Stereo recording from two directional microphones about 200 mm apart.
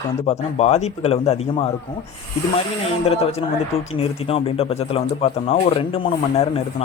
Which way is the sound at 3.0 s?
30° left (ahead or behind).